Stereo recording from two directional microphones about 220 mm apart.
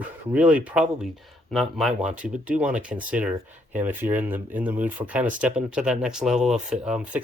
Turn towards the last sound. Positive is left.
turn(degrees=-5)  # may be behind; listen again after turning